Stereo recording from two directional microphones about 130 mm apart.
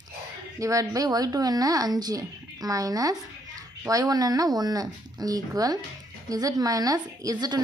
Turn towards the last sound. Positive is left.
turn(degrees=-30)  # may be behind; listen again after turning